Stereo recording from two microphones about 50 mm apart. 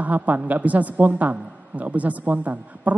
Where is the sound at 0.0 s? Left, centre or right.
Right.